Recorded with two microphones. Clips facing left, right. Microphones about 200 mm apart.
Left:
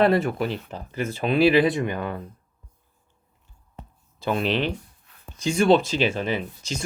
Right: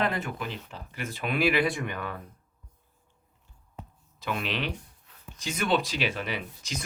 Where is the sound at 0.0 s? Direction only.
35° left (ahead or behind).